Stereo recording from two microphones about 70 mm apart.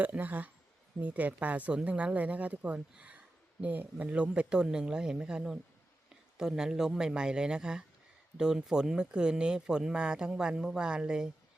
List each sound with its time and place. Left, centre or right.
0.0 s a woman's voice: right